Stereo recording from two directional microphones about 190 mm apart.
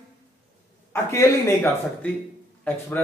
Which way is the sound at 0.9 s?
15° left (ahead or behind).